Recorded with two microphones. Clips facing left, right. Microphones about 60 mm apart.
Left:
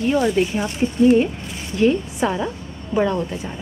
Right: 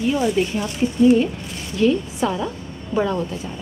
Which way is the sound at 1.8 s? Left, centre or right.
Left.